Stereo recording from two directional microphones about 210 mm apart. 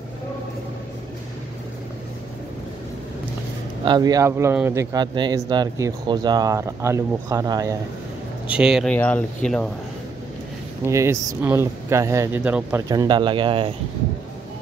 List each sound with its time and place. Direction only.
3.8 s speech: 20° right (ahead or behind)
8.5 s speech: 5° right (ahead or behind)
10.9 s speech: 15° right (ahead or behind)
12.8 s speech: 20° right (ahead or behind)